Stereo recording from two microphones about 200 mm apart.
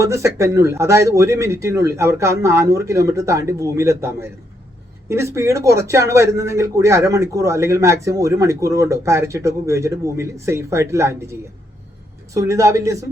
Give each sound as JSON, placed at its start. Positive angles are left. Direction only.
{"t": 0.0, "sound": "speech", "side_deg": -15}